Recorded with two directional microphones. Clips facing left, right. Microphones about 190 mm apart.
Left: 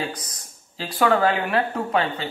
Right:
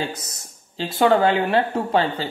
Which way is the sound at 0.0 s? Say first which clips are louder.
Right 2 dB; 25° right (ahead or behind).